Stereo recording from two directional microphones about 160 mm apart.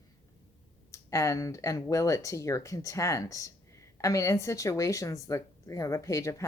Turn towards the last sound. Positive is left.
turn(degrees=20)  # may be behind; listen again after turning